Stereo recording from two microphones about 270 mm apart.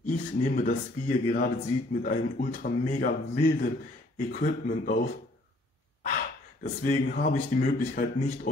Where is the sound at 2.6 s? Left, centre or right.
Left.